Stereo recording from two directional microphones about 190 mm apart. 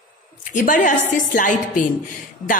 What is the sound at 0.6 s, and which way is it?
Speech, 40° left (ahead or behind).